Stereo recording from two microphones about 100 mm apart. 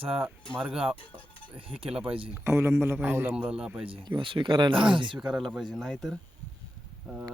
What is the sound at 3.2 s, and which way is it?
Speech, 10° right (ahead or behind).